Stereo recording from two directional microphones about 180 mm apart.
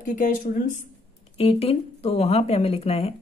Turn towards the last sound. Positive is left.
turn(degrees=35)  # may be behind; listen again after turning